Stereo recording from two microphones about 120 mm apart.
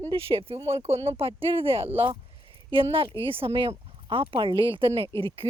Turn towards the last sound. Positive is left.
turn(degrees=-50)  # may be behind; listen again after turning